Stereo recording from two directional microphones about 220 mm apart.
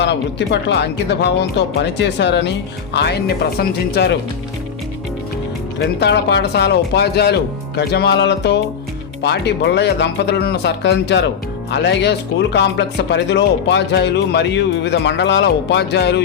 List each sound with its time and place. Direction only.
0.0 s speech: 50° left (ahead or behind)
6.0 s speech: 50° left (ahead or behind)